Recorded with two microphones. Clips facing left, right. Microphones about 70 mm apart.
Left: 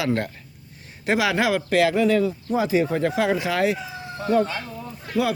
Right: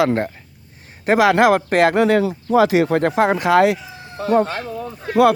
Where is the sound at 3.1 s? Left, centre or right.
Right.